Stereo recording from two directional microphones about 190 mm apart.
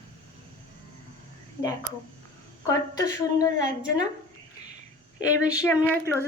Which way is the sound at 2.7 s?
15° left (ahead or behind).